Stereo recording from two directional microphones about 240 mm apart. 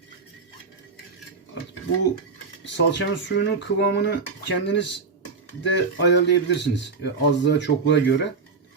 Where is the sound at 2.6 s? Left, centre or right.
Left.